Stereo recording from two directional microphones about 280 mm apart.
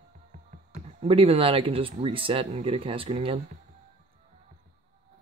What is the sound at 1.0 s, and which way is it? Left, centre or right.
Speech, right.